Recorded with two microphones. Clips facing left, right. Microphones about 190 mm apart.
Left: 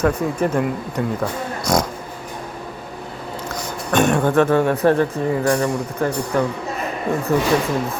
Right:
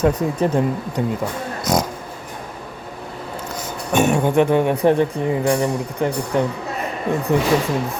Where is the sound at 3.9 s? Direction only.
10° right (ahead or behind).